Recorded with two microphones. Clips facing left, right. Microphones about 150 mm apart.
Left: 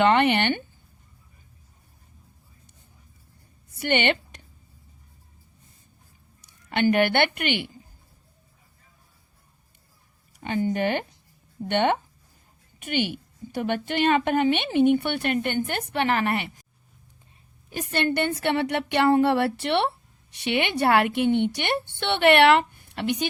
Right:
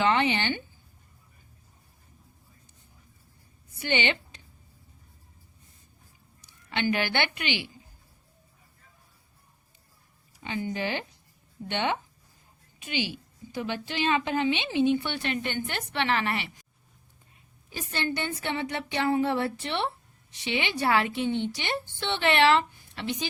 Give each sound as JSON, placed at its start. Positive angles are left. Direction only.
{"t": 0.0, "sound": "a woman's voice", "side_deg": 60}
{"t": 3.8, "sound": "a woman's voice", "side_deg": 60}
{"t": 6.7, "sound": "a woman's voice", "side_deg": 50}
{"t": 10.4, "sound": "a woman's voice", "side_deg": 50}
{"t": 17.7, "sound": "a woman's voice", "side_deg": 60}
{"t": 20.4, "sound": "a woman's voice", "side_deg": 60}